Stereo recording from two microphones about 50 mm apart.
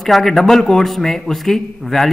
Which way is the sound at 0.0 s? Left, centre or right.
Centre.